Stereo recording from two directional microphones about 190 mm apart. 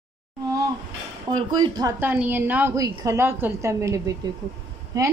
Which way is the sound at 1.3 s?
20° right (ahead or behind).